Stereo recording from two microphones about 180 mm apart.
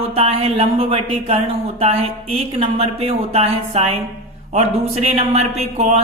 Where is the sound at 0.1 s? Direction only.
35° right (ahead or behind).